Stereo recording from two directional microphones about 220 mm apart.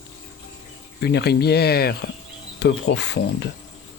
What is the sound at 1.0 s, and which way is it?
Speech, 45° left (ahead or behind).